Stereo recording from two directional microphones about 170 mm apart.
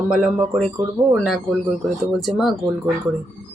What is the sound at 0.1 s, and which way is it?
Speech, 5° right (ahead or behind).